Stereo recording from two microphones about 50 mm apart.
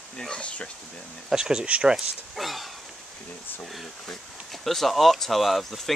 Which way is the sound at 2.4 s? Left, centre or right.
Centre.